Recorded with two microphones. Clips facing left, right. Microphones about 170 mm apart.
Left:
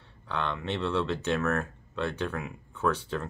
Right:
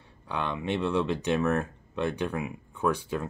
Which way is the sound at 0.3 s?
10° right (ahead or behind).